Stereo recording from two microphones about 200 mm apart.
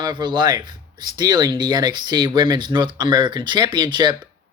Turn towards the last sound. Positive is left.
turn(degrees=-20)  # may be behind; listen again after turning